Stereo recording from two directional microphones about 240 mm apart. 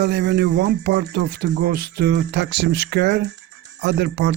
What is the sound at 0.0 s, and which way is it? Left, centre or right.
Speech, right.